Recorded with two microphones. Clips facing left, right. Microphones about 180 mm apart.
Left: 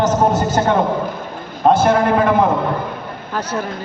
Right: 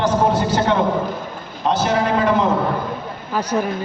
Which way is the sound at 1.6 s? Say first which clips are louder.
Left 5 dB; 50° left (ahead or behind).